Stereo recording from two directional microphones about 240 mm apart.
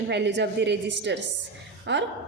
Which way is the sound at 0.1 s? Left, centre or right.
Right.